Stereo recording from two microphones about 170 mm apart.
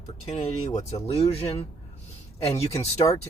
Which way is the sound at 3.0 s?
25° left (ahead or behind).